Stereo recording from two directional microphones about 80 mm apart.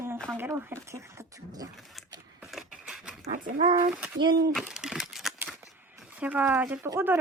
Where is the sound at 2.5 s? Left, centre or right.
Centre.